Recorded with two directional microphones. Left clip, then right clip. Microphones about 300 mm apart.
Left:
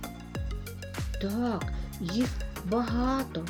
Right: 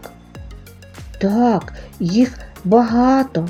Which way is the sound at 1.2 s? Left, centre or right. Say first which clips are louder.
Right 16 dB; left.